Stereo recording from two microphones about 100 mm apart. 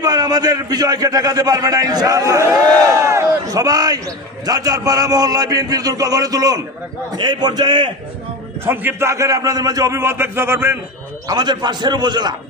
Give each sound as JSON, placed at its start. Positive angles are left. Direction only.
{"t": 0.0, "sound": "a man's voice", "side_deg": -40}
{"t": 3.4, "sound": "a man's voice", "side_deg": -40}
{"t": 8.6, "sound": "a man's voice", "side_deg": -20}
{"t": 11.3, "sound": "a man's voice", "side_deg": -45}